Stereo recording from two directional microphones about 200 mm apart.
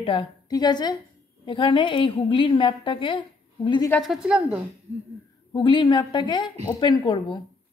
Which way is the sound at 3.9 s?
Centre (ahead or behind).